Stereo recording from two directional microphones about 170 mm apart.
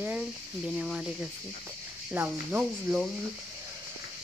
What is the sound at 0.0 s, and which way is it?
Speech, 5° right (ahead or behind).